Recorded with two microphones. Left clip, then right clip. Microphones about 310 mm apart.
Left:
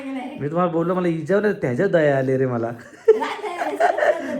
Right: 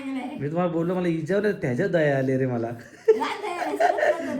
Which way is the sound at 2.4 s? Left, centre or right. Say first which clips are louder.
Left 4 dB; left.